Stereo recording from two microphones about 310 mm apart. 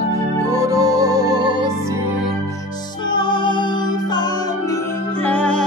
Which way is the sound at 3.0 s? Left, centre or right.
Centre.